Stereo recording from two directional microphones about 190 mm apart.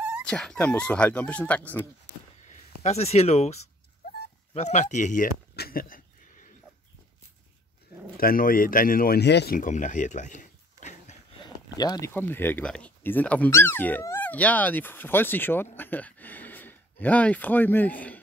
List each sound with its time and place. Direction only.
0.2 s speech: 5° left (ahead or behind)
2.4 s speech: 35° left (ahead or behind)
4.6 s a sound: 40° left (ahead or behind)
8.2 s speech: 50° left (ahead or behind)
9.6 s a sound: 40° left (ahead or behind)
11.4 s speech: 20° left (ahead or behind)